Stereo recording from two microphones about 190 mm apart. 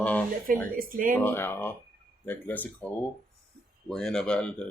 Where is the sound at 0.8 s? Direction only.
45° right (ahead or behind).